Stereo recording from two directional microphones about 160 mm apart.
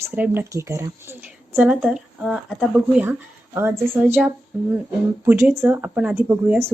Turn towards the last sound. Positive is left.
turn(degrees=-15)  # may be behind; listen again after turning